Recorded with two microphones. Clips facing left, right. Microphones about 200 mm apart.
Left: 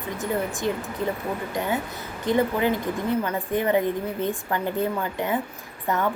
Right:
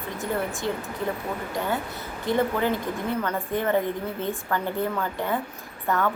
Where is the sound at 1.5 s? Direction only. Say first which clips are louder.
Even; 20° left (ahead or behind).